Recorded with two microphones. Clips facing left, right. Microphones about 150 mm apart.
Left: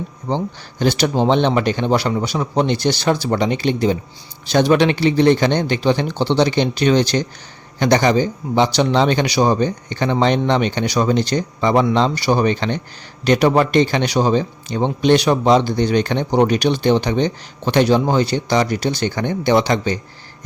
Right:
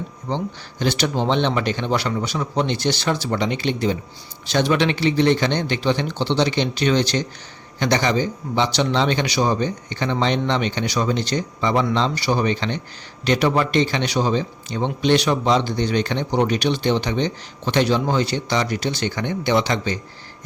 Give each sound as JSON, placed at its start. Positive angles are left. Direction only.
{"t": 0.3, "sound": "a man's voice", "side_deg": 40}